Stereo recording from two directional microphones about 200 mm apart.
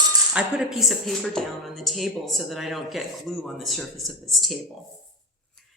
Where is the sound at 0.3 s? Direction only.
5° right (ahead or behind).